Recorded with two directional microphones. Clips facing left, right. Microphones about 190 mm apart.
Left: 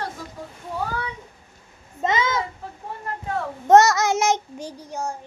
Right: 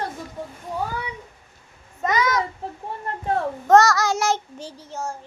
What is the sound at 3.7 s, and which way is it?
Child singing, 20° left (ahead or behind).